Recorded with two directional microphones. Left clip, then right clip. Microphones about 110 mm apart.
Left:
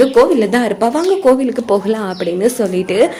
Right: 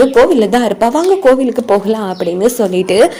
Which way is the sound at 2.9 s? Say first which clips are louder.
Right 4 dB; 70° right (ahead or behind).